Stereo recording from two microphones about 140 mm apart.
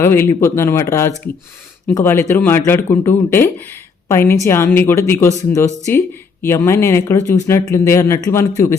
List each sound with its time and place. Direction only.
0.0 s a man's voice: 15° left (ahead or behind)